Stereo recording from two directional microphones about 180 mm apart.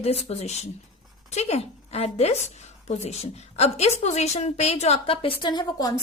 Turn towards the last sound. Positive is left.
turn(degrees=25)  # may be behind; listen again after turning